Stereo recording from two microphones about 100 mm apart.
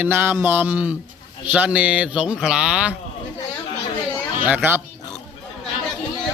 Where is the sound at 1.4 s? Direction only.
15° right (ahead or behind).